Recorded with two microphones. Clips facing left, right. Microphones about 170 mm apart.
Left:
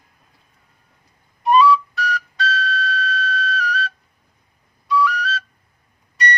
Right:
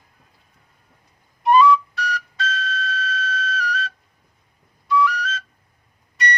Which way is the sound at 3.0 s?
40° left (ahead or behind).